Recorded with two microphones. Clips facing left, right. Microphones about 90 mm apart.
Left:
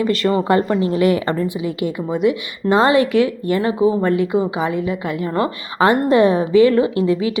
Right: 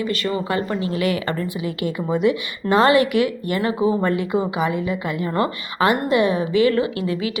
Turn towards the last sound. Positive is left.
turn(degrees=25)  # may be behind; listen again after turning